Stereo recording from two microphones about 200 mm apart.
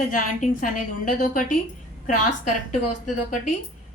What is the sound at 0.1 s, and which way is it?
A woman's voice, 40° left (ahead or behind).